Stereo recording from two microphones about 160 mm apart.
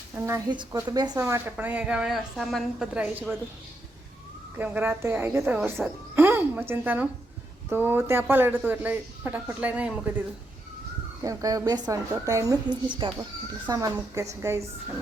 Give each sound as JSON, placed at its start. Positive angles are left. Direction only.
{"t": 0.2, "sound": "speech", "side_deg": -15}
{"t": 0.5, "sound": "a woman's voice", "side_deg": -30}
{"t": 4.5, "sound": "a woman's voice", "side_deg": -10}
{"t": 11.2, "sound": "a woman's voice", "side_deg": -20}